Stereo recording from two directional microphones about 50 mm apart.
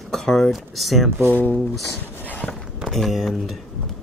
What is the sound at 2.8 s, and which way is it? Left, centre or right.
Speech, centre.